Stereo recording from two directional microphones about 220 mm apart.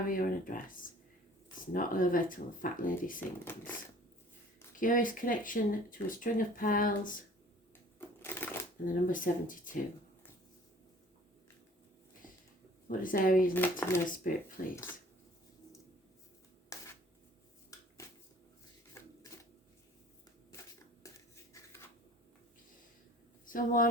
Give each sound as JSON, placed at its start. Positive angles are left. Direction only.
{"t": 0.1, "sound": "speech", "side_deg": 40}
{"t": 4.8, "sound": "speech", "side_deg": 35}
{"t": 7.9, "sound": "sewing machine", "side_deg": 10}
{"t": 8.9, "sound": "speech", "side_deg": 35}
{"t": 12.9, "sound": "speech", "side_deg": 40}
{"t": 13.5, "sound": "speech", "side_deg": 10}
{"t": 14.3, "sound": "speech", "side_deg": 40}
{"t": 16.7, "sound": "a sound", "side_deg": 15}
{"t": 21.5, "sound": "a sound", "side_deg": 15}
{"t": 23.5, "sound": "speech", "side_deg": 40}